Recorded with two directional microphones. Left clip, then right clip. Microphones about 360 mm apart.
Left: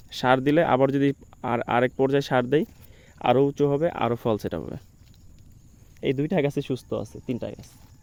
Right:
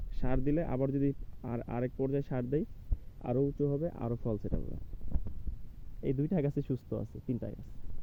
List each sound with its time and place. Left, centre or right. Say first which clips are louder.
0.1 s speech: left 14 dB; centre
6.0 s speech: left 10 dB; centre